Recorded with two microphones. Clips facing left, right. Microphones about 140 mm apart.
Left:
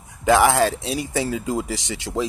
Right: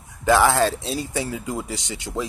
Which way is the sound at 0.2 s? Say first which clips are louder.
Left 1 dB; 20° left (ahead or behind).